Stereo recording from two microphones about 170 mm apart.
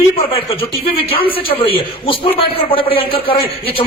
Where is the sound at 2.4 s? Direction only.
30° left (ahead or behind).